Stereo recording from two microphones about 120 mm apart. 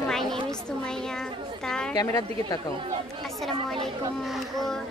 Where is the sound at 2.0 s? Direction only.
30° left (ahead or behind).